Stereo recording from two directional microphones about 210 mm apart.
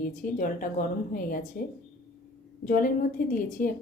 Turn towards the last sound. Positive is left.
turn(degrees=40)  # may be behind; listen again after turning